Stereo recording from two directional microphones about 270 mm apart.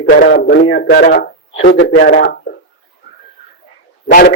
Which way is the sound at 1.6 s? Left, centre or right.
Left.